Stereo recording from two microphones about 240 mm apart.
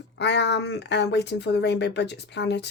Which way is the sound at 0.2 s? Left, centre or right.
Left.